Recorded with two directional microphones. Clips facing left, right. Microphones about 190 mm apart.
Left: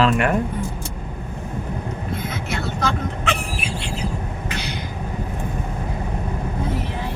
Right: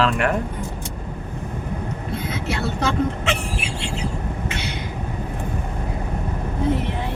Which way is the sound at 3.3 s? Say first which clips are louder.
Even; 25° right (ahead or behind).